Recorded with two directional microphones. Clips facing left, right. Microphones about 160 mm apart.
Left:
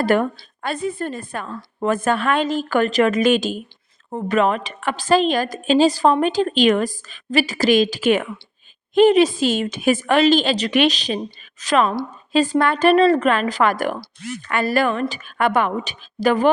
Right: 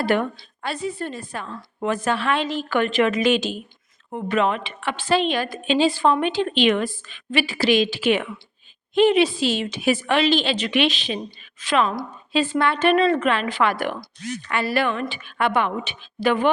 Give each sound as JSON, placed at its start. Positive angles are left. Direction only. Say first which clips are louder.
{"t": 0.0, "sound": "a woman's voice", "louder": "left 3 dB", "side_deg": 45}